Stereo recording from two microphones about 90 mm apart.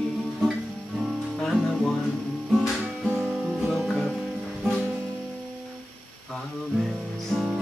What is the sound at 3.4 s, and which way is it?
Music, 5° right (ahead or behind).